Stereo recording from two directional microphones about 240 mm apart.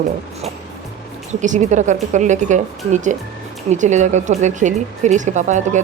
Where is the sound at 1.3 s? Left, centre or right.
Right.